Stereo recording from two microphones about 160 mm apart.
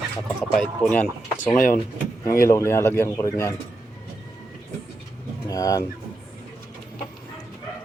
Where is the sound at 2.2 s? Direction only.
20° left (ahead or behind).